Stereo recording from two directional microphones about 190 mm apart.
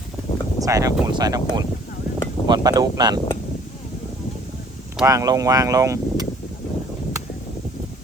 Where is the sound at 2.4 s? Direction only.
20° right (ahead or behind).